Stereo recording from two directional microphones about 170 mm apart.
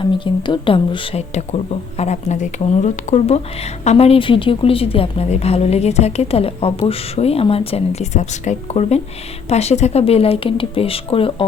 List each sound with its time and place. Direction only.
0.0 s speech: 30° left (ahead or behind)